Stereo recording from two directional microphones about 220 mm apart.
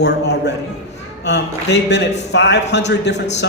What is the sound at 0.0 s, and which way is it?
A man's voice, 50° left (ahead or behind).